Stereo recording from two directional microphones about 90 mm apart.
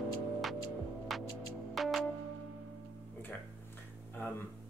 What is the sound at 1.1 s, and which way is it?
Hum, centre (ahead or behind).